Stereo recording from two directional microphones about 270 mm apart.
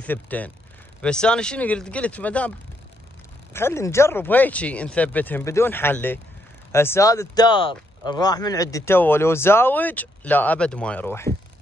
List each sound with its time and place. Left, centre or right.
0.0 s speech: centre
3.5 s speech: centre